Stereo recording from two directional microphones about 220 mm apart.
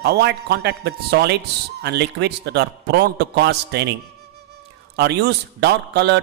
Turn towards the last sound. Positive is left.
turn(degrees=-50)  # may be behind; listen again after turning